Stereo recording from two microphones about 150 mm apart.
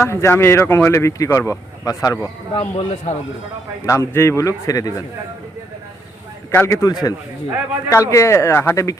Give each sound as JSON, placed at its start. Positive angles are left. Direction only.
{"t": 0.0, "sound": "speech", "side_deg": 15}
{"t": 2.6, "sound": "speech", "side_deg": 45}
{"t": 3.8, "sound": "a man's voice", "side_deg": 20}
{"t": 6.5, "sound": "a man's voice", "side_deg": 15}